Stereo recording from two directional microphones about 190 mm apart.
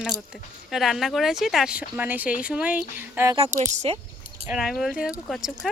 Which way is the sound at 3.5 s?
40° right (ahead or behind).